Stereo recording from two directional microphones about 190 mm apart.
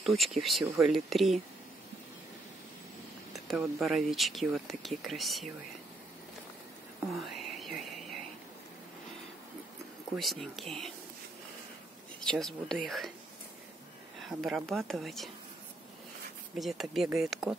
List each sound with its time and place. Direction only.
0.0 s speech: centre (ahead or behind)
3.3 s speech: centre (ahead or behind)
7.2 s whispering: centre (ahead or behind)
10.1 s speech: centre (ahead or behind)
12.3 s speech: centre (ahead or behind)
14.2 s speech: centre (ahead or behind)
16.5 s speech: centre (ahead or behind)